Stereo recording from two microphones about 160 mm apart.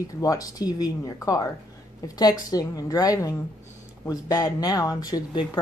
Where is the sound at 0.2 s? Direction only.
20° left (ahead or behind).